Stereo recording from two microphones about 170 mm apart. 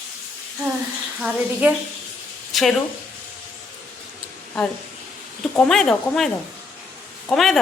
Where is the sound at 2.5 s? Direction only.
Centre (ahead or behind).